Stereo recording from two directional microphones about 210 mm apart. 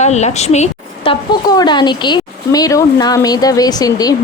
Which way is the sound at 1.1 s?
20° left (ahead or behind).